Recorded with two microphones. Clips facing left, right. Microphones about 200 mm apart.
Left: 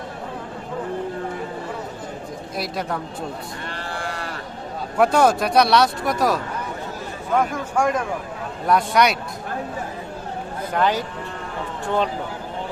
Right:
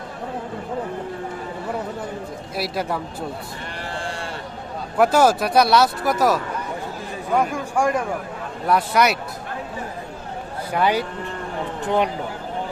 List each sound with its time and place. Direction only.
2.6 s speech: 5° right (ahead or behind)
3.9 s sheep: 25° right (ahead or behind)
4.9 s speech: 5° right (ahead or behind)
10.7 s speech: 10° right (ahead or behind)